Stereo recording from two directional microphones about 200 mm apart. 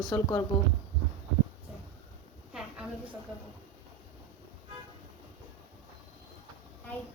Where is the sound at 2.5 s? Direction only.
5° right (ahead or behind).